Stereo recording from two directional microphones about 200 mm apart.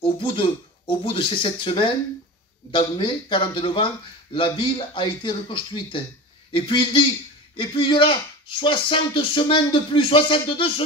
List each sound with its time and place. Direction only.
0.0 s speech: 25° left (ahead or behind)